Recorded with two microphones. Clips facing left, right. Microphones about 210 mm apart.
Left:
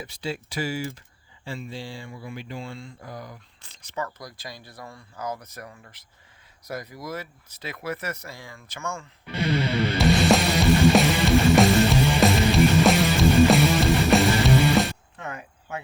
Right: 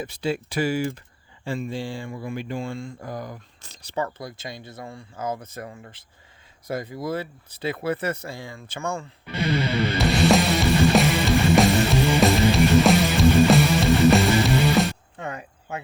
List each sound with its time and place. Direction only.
0.0 s speech: 55° right (ahead or behind); by 9.0 s 35° right (ahead or behind)
10.0 s music: centre (ahead or behind)
15.2 s a sound: 30° right (ahead or behind)